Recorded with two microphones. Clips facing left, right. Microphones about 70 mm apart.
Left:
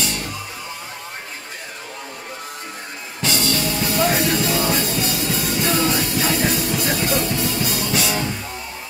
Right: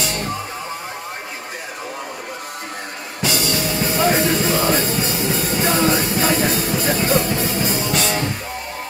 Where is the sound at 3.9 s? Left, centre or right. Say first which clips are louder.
Right 2 dB; right.